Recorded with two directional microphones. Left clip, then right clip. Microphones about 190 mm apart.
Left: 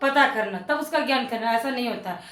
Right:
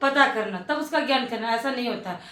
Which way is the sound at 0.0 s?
15° left (ahead or behind).